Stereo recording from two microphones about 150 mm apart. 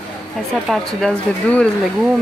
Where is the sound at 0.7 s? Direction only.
Centre (ahead or behind).